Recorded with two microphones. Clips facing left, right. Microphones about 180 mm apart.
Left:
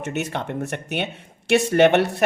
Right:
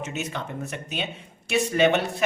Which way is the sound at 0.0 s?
65° left (ahead or behind).